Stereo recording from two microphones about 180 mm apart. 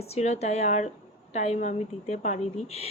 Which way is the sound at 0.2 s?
40° left (ahead or behind).